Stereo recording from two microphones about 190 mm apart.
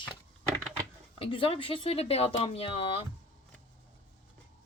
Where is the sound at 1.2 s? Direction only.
30° left (ahead or behind).